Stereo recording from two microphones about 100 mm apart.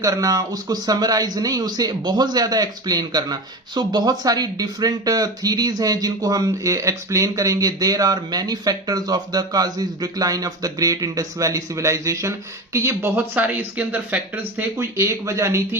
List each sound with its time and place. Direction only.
0.0 s speech: 35° right (ahead or behind); by 14.7 s 15° right (ahead or behind)
14.8 s speech: 30° right (ahead or behind)